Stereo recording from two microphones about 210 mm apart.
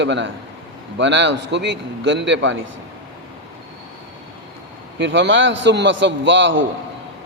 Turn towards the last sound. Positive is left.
turn(degrees=-60)  # may be behind; listen again after turning